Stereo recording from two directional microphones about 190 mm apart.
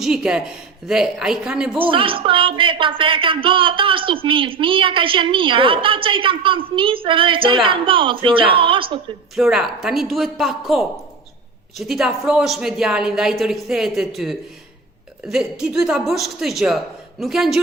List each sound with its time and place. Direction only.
0.0 s a woman's voice: 5° right (ahead or behind)
1.8 s speech: 25° right (ahead or behind)
9.3 s a woman's voice: 5° right (ahead or behind)